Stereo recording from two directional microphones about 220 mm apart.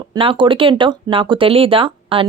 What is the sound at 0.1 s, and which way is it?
Speech, 25° right (ahead or behind).